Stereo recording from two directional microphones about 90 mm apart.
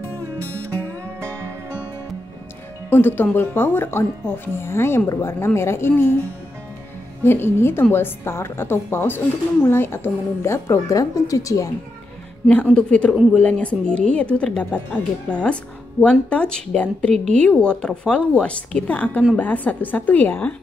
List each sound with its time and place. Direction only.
2.9 s a woman's voice: 25° left (ahead or behind)
7.2 s a woman's voice: 25° left (ahead or behind)
12.7 s a woman's voice: 10° left (ahead or behind)